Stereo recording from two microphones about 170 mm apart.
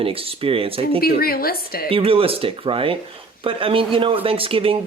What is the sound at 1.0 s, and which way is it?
Speech, 60° left (ahead or behind).